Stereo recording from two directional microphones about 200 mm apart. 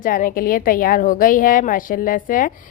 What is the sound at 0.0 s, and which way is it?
A woman's voice, 45° left (ahead or behind).